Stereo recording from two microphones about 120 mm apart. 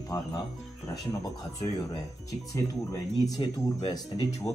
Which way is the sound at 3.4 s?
35° left (ahead or behind).